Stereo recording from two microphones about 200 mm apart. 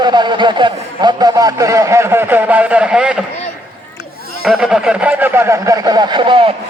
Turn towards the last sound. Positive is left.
turn(degrees=-25)  # may be behind; listen again after turning